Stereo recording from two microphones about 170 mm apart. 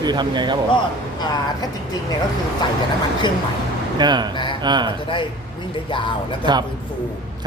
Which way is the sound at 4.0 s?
25° right (ahead or behind).